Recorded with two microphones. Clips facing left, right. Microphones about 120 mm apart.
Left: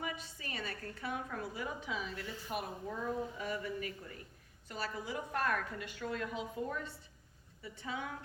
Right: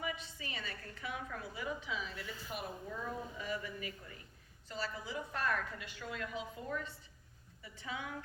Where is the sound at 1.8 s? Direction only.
45° left (ahead or behind).